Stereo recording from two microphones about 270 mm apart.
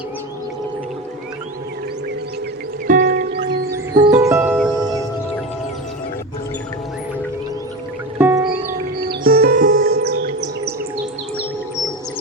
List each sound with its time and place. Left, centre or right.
2.8 s music: right
4.1 s music: centre
8.2 s music: centre
9.0 s music: right